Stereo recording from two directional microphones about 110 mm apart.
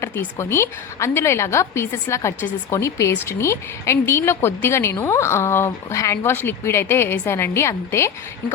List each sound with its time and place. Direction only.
0.0 s a woman's voice: 25° left (ahead or behind)